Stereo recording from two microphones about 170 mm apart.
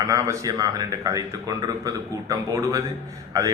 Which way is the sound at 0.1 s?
20° right (ahead or behind).